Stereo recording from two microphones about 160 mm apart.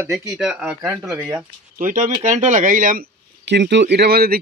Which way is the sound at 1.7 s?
55° right (ahead or behind).